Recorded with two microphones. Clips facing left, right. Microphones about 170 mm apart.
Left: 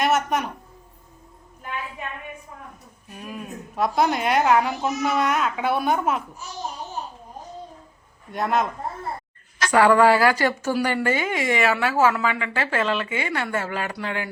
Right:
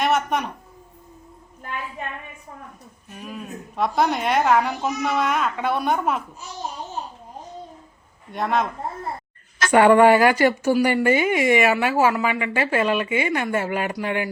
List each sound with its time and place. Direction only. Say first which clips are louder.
0.0 s a woman's voice: even; centre (ahead or behind)
3.2 s a woman's voice: even; centre (ahead or behind)
8.3 s a woman's voice: even; centre (ahead or behind)
9.7 s speech: right 3 dB; 20° right (ahead or behind)